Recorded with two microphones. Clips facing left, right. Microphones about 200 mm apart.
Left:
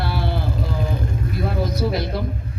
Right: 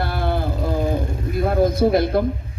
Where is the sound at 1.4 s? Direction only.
50° right (ahead or behind).